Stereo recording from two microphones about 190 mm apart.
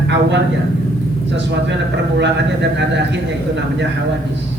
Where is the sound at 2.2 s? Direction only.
65° right (ahead or behind).